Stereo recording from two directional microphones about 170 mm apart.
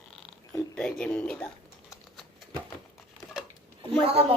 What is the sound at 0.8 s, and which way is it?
Speech, 5° left (ahead or behind).